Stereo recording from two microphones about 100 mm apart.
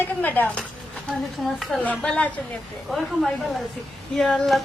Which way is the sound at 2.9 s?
Centre (ahead or behind).